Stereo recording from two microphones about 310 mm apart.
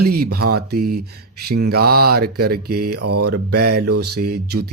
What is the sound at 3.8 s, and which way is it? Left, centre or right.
Mantra, right.